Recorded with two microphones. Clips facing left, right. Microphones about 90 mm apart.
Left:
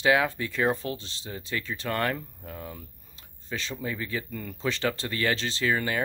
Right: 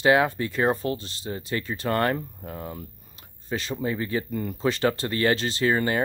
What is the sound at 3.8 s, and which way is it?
Speech, 45° right (ahead or behind).